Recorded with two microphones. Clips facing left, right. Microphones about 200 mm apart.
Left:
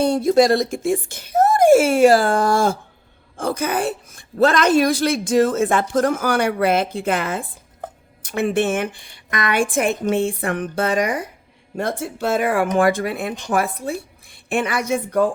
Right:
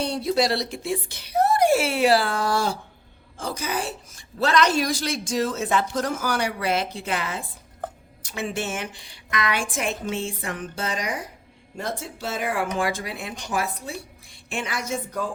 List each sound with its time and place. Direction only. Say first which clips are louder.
0.0 s a woman's voice: left 8 dB; 50° left (ahead or behind)